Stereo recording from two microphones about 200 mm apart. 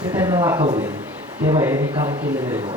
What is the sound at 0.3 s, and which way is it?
A man's voice, 20° right (ahead or behind).